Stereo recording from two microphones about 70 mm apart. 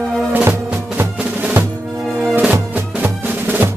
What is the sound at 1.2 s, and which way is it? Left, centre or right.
Percussion, right.